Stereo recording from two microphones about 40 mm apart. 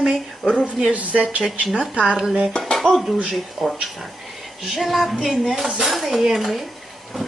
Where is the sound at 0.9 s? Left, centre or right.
Right.